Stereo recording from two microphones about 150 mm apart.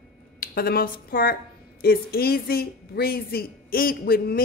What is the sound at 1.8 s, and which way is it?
Speech, 90° left.